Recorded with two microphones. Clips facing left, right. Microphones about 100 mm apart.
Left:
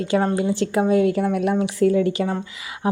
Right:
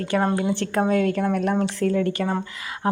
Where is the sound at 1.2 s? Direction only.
35° right (ahead or behind).